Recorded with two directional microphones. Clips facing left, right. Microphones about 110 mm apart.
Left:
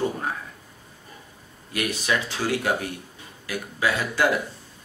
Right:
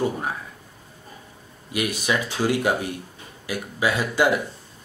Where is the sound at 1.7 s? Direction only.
15° right (ahead or behind).